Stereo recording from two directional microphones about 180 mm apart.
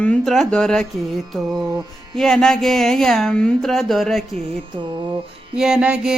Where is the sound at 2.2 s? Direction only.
5° left (ahead or behind).